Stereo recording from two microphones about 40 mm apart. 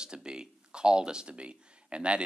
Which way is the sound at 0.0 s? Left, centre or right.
Centre.